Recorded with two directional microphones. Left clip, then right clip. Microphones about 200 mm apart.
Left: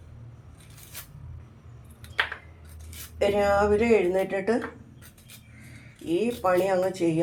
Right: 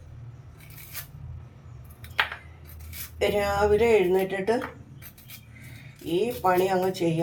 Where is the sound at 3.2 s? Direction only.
20° left (ahead or behind).